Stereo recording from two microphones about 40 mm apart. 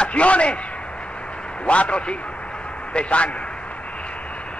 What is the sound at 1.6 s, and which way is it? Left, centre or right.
A man's voice, left.